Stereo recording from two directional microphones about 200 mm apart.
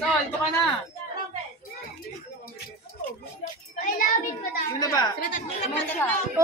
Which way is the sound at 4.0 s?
45° left (ahead or behind).